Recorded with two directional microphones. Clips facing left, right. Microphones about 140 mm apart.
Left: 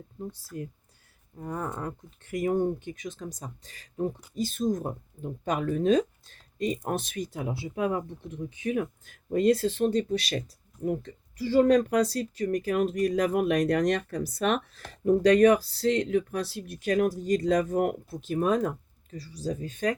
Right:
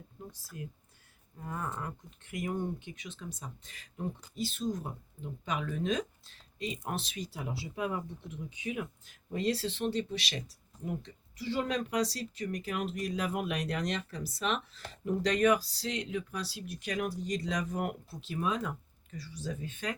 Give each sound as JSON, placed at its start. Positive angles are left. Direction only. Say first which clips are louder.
{"t": 0.3, "sound": "speech", "louder": "left 11 dB", "side_deg": 35}
{"t": 1.8, "sound": "speech", "louder": "left 5 dB", "side_deg": 40}
{"t": 15.4, "sound": "speech", "louder": "left 4 dB", "side_deg": 40}
{"t": 15.6, "sound": "speech", "louder": "left 11 dB", "side_deg": 55}